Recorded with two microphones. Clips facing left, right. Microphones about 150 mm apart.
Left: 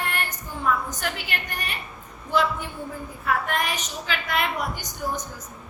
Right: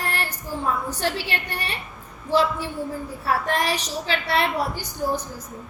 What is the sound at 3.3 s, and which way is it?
A woman's voice, 35° right (ahead or behind).